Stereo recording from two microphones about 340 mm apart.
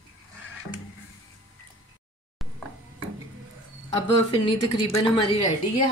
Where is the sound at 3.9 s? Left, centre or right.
Centre.